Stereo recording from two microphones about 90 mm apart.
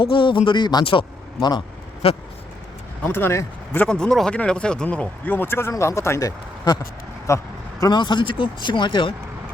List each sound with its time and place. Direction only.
0.0 s speech: 70° left (ahead or behind); by 0.9 s 50° left (ahead or behind)
0.9 s speech: 65° left (ahead or behind)
2.0 s speech: 90° left
3.0 s speech: 20° left (ahead or behind)
3.7 s speech: 10° left (ahead or behind); by 6.7 s 40° left (ahead or behind)
7.3 s vehicle: 35° left (ahead or behind)
7.9 s speech: 60° left (ahead or behind)